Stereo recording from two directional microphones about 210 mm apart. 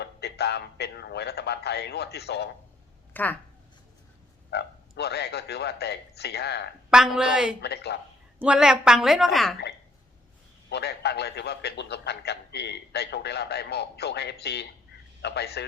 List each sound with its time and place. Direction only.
0.0 s a man's voice: 50° left (ahead or behind)
3.1 s speech: 10° left (ahead or behind)
4.5 s a man's voice: 50° left (ahead or behind)
6.9 s a woman's voice: 5° right (ahead or behind)
7.6 s a man's voice: 50° left (ahead or behind)
8.4 s a woman's voice: 5° right (ahead or behind)
10.7 s a man's voice: 50° left (ahead or behind)